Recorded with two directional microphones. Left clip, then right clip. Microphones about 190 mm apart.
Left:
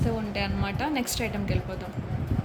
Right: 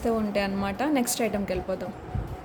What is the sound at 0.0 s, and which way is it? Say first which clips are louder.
A woman's voice: right 4 dB; 45° right (ahead or behind).